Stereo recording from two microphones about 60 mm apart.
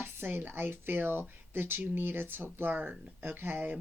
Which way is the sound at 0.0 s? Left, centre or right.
Right.